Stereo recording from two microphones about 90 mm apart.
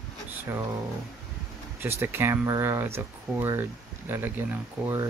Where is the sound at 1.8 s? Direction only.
25° right (ahead or behind).